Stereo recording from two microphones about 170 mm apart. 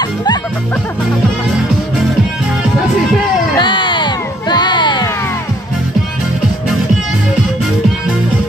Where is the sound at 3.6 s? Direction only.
30° left (ahead or behind).